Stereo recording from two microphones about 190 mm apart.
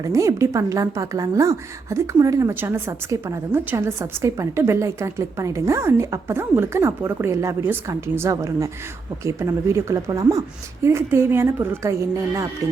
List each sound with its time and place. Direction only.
0.0 s a woman's voice: 15° right (ahead or behind)